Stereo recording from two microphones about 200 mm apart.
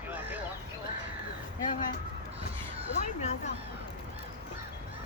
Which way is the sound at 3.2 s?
35° left (ahead or behind).